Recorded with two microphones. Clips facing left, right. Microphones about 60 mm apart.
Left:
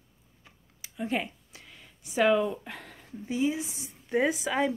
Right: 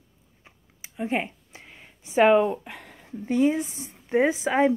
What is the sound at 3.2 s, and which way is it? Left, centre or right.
A woman's voice, right.